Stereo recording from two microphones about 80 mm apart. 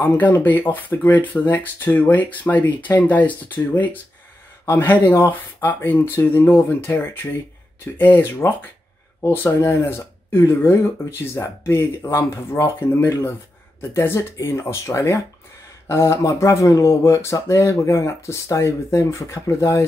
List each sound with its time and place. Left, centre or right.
0.0 s speech: left